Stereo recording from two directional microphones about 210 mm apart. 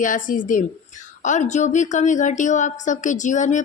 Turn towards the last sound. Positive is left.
turn(degrees=35)  # may be behind; listen again after turning